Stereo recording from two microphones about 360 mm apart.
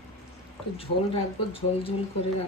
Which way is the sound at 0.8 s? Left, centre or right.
Centre.